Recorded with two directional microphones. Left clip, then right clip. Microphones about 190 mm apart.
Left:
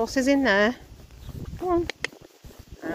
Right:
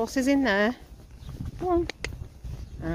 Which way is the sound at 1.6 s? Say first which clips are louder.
Left 1 dB; 10° right (ahead or behind).